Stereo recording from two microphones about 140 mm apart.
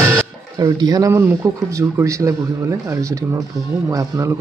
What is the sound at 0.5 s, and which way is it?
Speech, 25° right (ahead or behind).